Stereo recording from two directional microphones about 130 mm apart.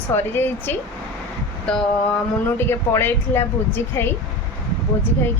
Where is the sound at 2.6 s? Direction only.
20° left (ahead or behind).